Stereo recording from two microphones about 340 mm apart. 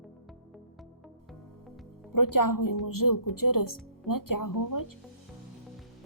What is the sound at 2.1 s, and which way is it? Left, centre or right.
Speech, left.